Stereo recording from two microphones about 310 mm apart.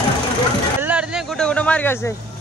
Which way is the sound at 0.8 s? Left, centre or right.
Centre.